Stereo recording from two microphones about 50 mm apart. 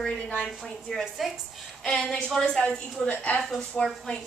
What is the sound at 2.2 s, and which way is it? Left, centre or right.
A woman's voice, centre.